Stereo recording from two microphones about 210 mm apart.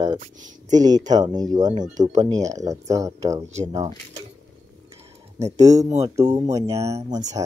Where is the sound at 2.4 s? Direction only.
15° right (ahead or behind).